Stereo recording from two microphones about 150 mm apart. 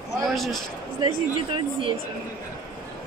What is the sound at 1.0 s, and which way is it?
Speech, 35° right (ahead or behind).